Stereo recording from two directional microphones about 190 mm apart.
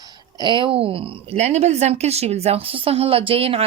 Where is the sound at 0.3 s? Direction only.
25° right (ahead or behind).